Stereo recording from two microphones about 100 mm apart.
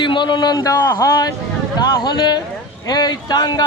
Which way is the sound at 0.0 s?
50° left (ahead or behind).